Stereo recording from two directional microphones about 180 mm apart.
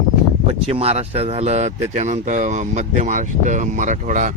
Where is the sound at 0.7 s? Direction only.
35° right (ahead or behind).